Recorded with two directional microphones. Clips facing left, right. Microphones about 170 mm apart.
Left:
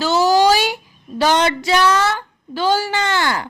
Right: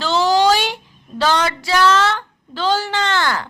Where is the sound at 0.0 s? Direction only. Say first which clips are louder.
Left 1 dB; 10° left (ahead or behind).